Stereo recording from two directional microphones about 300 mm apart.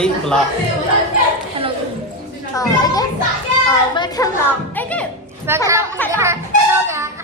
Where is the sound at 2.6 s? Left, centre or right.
Centre.